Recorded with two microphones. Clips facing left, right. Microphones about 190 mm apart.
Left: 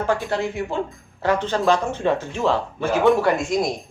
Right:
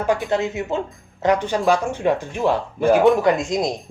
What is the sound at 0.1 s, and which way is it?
Speech, 20° right (ahead or behind).